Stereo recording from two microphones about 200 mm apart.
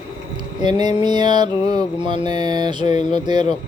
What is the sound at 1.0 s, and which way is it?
Speech, 20° right (ahead or behind).